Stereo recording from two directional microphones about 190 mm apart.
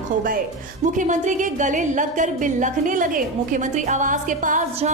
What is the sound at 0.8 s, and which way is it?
A woman's voice, 40° right (ahead or behind).